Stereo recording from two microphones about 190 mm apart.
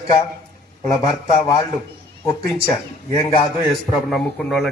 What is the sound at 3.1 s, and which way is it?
Speech, 30° left (ahead or behind).